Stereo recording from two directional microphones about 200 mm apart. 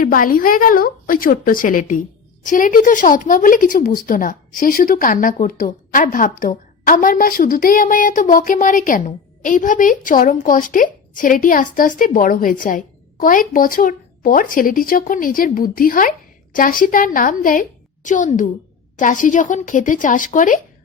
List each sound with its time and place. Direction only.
0.0 s a woman's voice: 45° left (ahead or behind)